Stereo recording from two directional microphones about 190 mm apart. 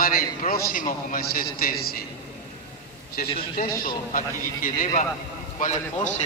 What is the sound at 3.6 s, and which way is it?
A man's voice, 50° left (ahead or behind).